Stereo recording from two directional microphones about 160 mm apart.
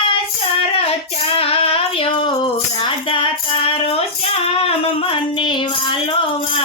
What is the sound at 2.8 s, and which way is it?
Tambourine, 35° left (ahead or behind).